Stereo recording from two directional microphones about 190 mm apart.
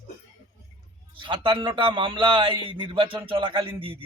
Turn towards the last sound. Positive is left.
turn(degrees=-30)  # may be behind; listen again after turning